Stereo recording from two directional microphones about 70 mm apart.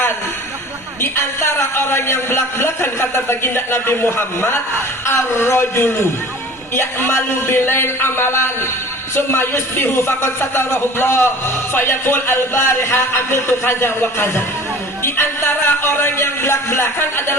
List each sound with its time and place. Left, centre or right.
1.0 s a man's voice: left